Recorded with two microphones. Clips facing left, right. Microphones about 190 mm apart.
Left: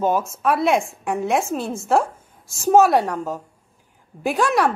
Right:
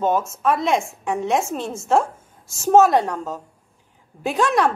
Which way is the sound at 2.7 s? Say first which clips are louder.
Even; 10° left (ahead or behind).